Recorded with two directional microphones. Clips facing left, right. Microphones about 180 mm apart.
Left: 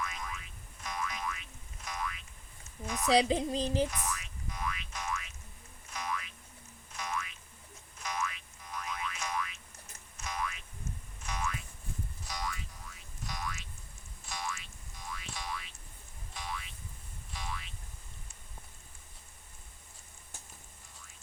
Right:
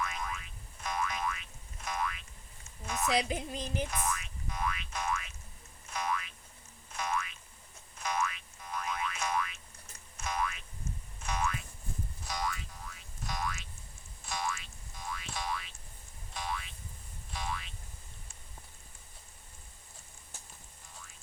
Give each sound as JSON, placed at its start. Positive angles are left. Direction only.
{"t": 0.0, "sound": "boing", "side_deg": -55}
{"t": 3.1, "sound": "speech", "side_deg": 30}
{"t": 3.9, "sound": "boing", "side_deg": -55}